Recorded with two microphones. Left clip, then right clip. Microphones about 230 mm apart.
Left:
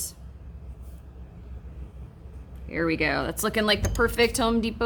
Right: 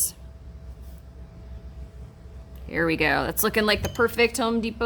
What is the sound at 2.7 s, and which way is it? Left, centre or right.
A woman's voice, right.